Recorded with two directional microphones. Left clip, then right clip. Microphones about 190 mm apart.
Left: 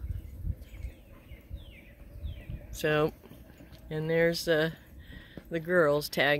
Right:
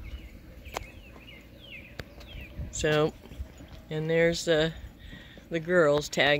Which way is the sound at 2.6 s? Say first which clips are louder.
Right 2 dB; 5° left (ahead or behind).